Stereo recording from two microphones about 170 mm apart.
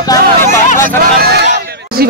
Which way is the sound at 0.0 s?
20° left (ahead or behind).